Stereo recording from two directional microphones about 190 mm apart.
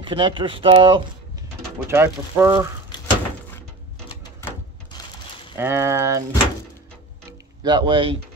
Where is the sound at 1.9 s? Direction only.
15° right (ahead or behind).